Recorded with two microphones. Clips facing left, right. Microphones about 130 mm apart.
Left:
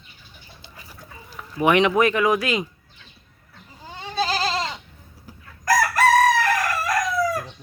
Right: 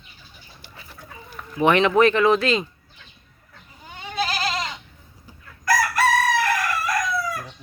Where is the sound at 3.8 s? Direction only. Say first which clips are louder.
Left 2 dB; 30° left (ahead or behind).